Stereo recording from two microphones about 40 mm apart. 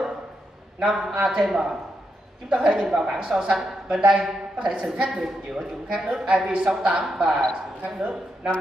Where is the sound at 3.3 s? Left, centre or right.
Centre.